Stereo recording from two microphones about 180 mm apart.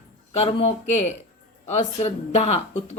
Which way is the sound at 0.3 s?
35° left (ahead or behind).